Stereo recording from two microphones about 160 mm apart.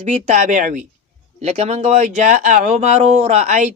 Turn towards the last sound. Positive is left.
turn(degrees=-45)  # may be behind; listen again after turning